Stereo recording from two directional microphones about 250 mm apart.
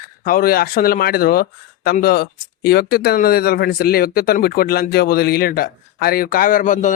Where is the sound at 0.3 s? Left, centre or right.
Left.